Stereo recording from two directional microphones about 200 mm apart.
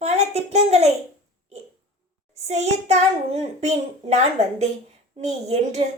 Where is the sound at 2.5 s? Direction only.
35° right (ahead or behind).